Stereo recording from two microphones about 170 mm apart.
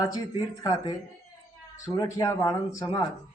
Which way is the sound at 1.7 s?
20° left (ahead or behind).